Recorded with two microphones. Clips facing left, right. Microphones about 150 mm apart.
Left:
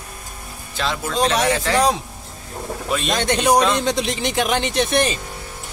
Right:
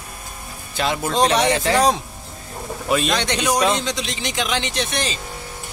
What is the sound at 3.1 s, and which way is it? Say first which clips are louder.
Speech: left 4 dB; 50° left (ahead or behind).